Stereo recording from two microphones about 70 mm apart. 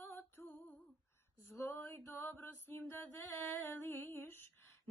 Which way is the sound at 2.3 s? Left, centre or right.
Left.